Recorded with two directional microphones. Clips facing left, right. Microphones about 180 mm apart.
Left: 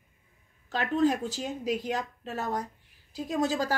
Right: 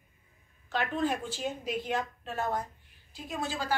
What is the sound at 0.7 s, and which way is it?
A woman's voice, 40° left (ahead or behind).